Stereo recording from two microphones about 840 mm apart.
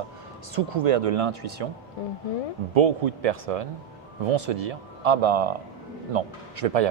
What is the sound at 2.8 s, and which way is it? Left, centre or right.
Speech, right.